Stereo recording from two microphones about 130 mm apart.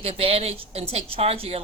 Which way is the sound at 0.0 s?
50° right (ahead or behind).